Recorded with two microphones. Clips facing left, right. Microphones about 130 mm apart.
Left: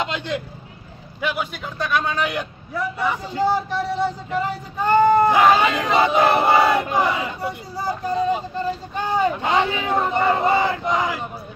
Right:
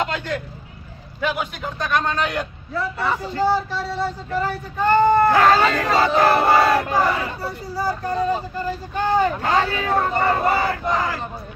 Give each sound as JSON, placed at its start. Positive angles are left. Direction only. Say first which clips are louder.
{"t": 0.0, "sound": "speech", "louder": "right 1 dB", "side_deg": 20}
{"t": 1.2, "sound": "a man's voice", "louder": "right 1 dB", "side_deg": 0}